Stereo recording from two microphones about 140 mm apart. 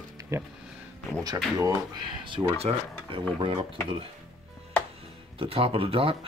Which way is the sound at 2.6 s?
40° right (ahead or behind).